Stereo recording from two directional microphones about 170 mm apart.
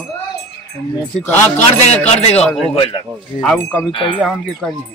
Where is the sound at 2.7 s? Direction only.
30° left (ahead or behind).